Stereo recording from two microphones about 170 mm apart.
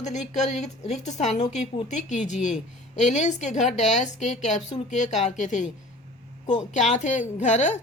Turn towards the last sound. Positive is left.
turn(degrees=45)  # may be behind; listen again after turning